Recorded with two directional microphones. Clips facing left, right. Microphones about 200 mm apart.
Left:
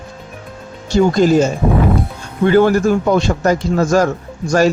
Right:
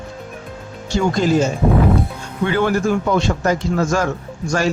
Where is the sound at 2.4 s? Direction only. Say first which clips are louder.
Left 6 dB; 40° left (ahead or behind).